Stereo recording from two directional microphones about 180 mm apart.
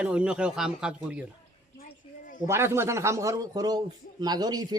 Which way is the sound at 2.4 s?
15° right (ahead or behind).